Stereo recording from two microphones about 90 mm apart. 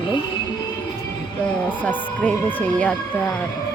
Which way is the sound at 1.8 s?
15° left (ahead or behind).